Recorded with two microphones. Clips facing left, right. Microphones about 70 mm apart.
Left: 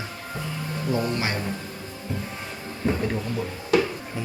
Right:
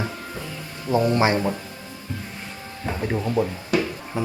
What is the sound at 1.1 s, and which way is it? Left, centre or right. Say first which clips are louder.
Speech: right 8 dB; right.